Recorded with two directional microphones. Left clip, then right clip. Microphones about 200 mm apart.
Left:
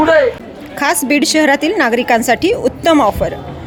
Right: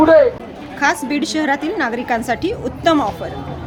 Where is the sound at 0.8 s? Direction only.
40° left (ahead or behind).